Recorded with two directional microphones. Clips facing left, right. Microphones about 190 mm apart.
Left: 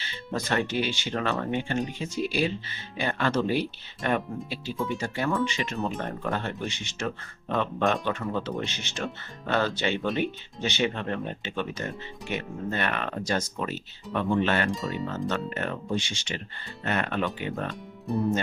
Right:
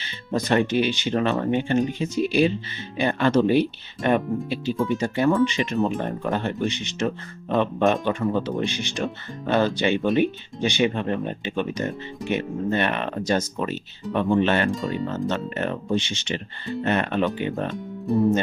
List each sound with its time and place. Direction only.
0.0 s speech: 20° right (ahead or behind)
14.7 s speech: centre (ahead or behind)
15.3 s speech: 20° right (ahead or behind)
17.7 s speech: centre (ahead or behind)